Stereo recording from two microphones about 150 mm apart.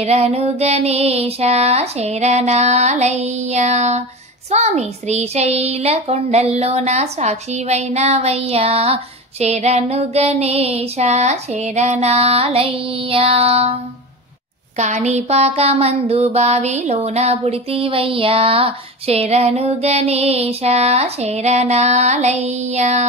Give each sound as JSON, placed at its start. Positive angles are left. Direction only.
{"t": 0.0, "sound": "a child's voice", "side_deg": -45}
{"t": 14.8, "sound": "a child's voice", "side_deg": -50}